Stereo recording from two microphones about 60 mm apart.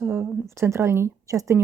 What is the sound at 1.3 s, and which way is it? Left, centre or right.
Speech, right.